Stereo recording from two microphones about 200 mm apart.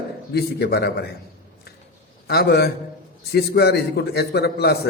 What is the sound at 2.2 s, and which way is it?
A man's voice, 50° left (ahead or behind).